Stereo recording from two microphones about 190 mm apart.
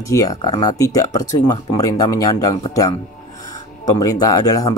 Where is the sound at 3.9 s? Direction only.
20° left (ahead or behind).